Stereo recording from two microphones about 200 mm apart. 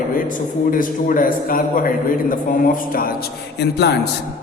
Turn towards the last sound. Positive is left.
turn(degrees=55)  # may be behind; listen again after turning